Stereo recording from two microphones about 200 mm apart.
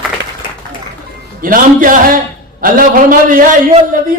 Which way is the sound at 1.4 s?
45° right (ahead or behind).